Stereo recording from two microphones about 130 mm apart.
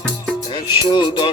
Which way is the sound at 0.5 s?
35° left (ahead or behind).